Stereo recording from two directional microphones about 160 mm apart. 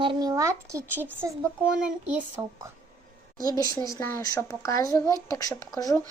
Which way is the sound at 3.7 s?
20° left (ahead or behind).